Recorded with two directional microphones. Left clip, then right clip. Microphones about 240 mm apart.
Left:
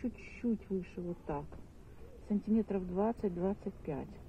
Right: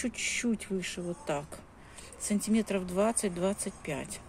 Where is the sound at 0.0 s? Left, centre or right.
Right.